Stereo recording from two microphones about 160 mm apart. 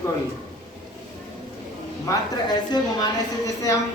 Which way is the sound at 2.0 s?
25° left (ahead or behind).